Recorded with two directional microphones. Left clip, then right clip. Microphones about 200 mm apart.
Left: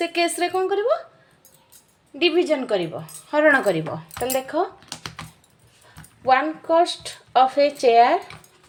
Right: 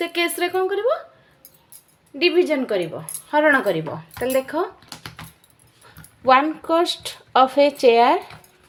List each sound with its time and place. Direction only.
0.0 s speech: 5° right (ahead or behind)
2.1 s speech: 5° right (ahead or behind)
4.9 s typing: 15° left (ahead or behind)
6.2 s speech: 20° right (ahead or behind)